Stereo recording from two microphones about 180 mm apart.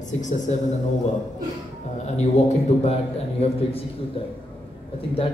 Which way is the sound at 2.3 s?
35° left (ahead or behind).